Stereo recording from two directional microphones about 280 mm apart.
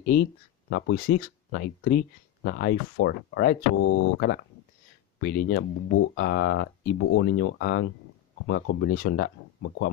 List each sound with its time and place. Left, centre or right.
0.0 s speech: left
0.7 s speech: left